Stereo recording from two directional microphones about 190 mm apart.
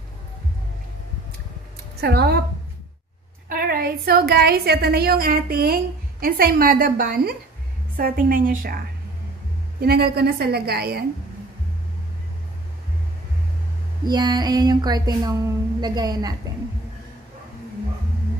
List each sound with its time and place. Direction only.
2.0 s a woman's voice: 60° right (ahead or behind)
3.4 s a woman's voice: 50° right (ahead or behind)
14.0 s a sound: 20° right (ahead or behind)